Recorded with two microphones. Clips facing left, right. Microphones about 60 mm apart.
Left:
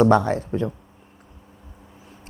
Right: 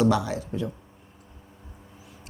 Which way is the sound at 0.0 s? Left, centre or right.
Left.